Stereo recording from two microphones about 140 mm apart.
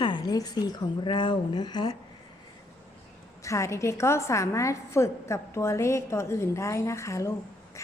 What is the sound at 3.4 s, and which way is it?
A woman's voice, 20° left (ahead or behind).